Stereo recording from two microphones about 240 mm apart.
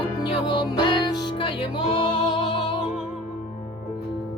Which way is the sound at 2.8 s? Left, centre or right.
Centre.